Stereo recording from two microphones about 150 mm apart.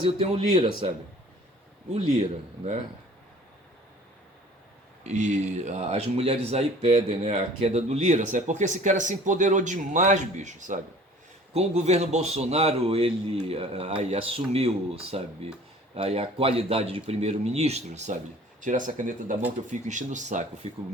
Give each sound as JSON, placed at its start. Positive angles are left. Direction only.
{"t": 0.0, "sound": "speech", "side_deg": -40}
{"t": 1.9, "sound": "speech", "side_deg": -45}
{"t": 5.0, "sound": "speech", "side_deg": -50}
{"t": 18.6, "sound": "speech", "side_deg": -60}